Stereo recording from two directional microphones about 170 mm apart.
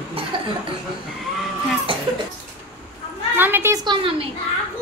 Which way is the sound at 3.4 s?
15° right (ahead or behind).